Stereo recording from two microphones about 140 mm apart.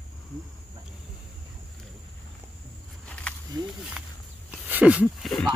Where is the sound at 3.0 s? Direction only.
10° left (ahead or behind).